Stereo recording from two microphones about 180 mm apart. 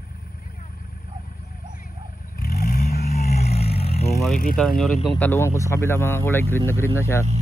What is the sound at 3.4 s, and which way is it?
Vehicle, 35° left (ahead or behind).